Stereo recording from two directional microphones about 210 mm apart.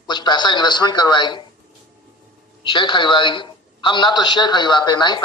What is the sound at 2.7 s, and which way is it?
A man's voice, 20° left (ahead or behind).